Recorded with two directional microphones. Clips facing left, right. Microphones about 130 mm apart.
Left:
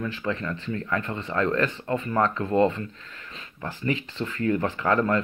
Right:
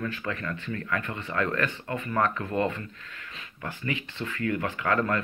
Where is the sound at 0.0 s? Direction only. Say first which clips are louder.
Left 3 dB; 25° left (ahead or behind).